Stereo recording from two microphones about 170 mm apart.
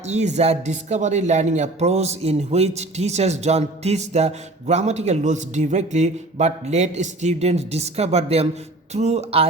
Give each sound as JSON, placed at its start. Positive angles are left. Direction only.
{"t": 0.1, "sound": "speech", "side_deg": -40}